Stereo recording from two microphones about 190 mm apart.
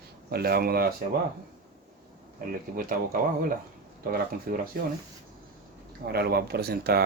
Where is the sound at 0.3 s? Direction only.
55° right (ahead or behind).